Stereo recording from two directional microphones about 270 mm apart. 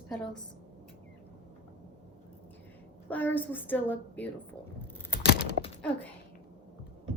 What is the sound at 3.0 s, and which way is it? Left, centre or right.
Speech, centre.